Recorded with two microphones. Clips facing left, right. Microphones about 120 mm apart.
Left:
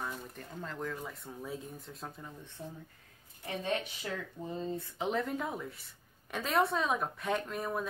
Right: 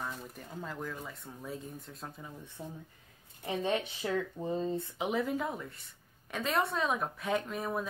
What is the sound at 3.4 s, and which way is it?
Speech, 25° right (ahead or behind).